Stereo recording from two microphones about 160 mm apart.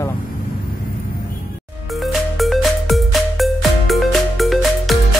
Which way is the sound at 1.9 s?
Centre (ahead or behind).